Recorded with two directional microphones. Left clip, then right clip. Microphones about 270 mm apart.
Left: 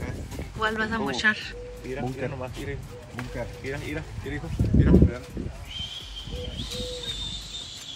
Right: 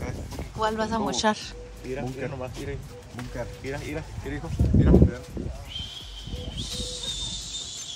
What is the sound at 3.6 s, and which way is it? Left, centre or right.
Speech, centre.